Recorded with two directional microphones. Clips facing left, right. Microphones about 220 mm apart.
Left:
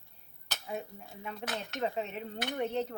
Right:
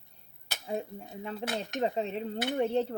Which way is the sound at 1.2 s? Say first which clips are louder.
Right 4 dB; 30° right (ahead or behind).